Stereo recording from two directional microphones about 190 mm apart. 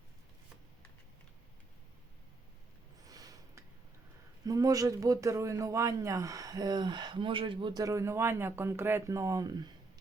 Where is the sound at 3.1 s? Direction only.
20° right (ahead or behind).